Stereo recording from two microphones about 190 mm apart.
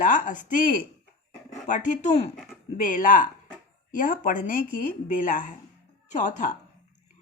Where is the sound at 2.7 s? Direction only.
45° left (ahead or behind).